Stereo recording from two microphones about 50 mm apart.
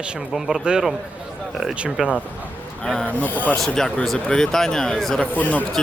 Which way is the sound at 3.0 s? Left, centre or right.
Left.